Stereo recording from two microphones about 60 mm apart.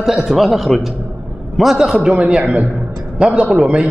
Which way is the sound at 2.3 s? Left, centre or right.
Right.